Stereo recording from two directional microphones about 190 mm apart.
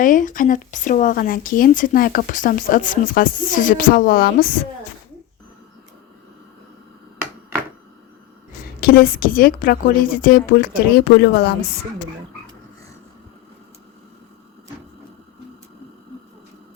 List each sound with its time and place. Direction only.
0.0 s speech: 45° left (ahead or behind)
8.8 s speech: 55° left (ahead or behind)